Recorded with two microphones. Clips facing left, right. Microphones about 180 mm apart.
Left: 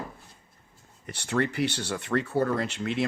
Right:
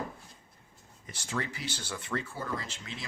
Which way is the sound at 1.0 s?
65° left (ahead or behind).